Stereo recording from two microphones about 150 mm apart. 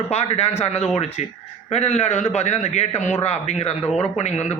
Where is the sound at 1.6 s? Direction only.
45° left (ahead or behind).